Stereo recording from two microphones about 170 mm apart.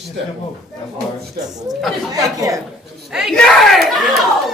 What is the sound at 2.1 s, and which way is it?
Speech, 20° right (ahead or behind).